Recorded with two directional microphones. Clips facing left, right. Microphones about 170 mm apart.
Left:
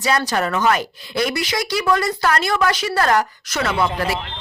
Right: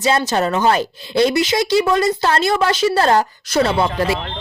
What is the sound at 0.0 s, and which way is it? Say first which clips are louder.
Speech: right 3 dB; 25° right (ahead or behind).